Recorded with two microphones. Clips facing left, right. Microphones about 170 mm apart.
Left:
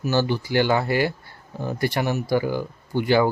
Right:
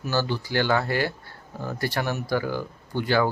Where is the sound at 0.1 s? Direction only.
15° left (ahead or behind).